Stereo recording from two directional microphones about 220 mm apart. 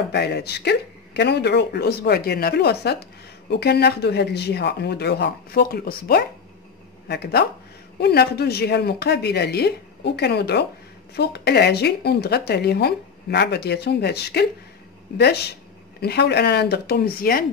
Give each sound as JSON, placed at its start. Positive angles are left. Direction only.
{"t": 0.1, "sound": "a woman's voice", "side_deg": 50}